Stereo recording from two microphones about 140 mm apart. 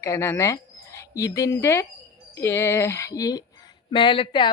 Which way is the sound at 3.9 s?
35° left (ahead or behind).